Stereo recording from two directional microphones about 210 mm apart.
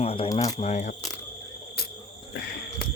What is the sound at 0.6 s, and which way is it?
Speech, 35° left (ahead or behind).